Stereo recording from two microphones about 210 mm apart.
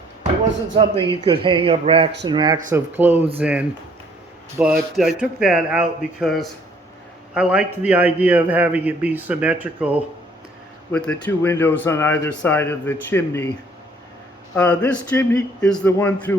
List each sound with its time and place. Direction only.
0.8 s a man's voice: 25° right (ahead or behind)
2.7 s a man's voice: 10° right (ahead or behind)
10.9 s speech: 5° left (ahead or behind)
14.5 s speech: 5° left (ahead or behind)